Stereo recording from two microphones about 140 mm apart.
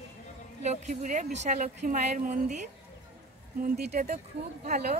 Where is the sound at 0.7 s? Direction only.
60° right (ahead or behind).